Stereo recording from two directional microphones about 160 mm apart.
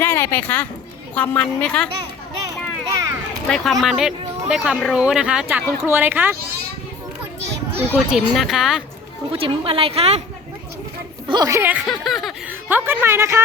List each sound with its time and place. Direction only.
0.0 s a woman's voice: 15° left (ahead or behind)
2.9 s children playing: 20° right (ahead or behind)
3.5 s speech: centre (ahead or behind)
7.9 s speech: centre (ahead or behind)
9.3 s a woman's voice: 35° right (ahead or behind)
11.3 s a woman's voice: 20° right (ahead or behind)
11.9 s speech: centre (ahead or behind); by 13.4 s 15° right (ahead or behind)